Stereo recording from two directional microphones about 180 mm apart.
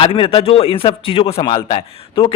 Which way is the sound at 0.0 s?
30° left (ahead or behind).